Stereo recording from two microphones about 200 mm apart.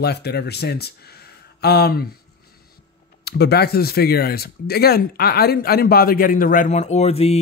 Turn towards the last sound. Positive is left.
turn(degrees=30)  # may be behind; listen again after turning